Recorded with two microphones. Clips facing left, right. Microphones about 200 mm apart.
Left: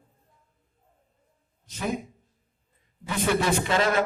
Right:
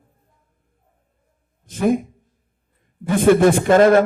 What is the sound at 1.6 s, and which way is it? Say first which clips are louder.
A man's voice: right 12 dB; 50° right (ahead or behind).